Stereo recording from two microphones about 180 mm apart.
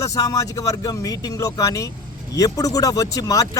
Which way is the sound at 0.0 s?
20° left (ahead or behind).